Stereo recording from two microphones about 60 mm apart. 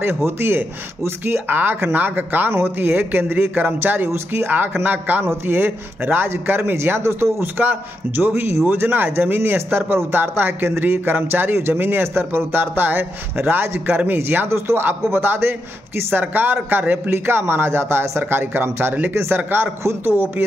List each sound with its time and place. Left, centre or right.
0.2 s speech: right
5.2 s speech: right
8.2 s speech: centre
8.6 s a man's voice: right
17.3 s speech: right